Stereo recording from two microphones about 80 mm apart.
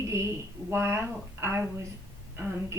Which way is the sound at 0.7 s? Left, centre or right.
Right.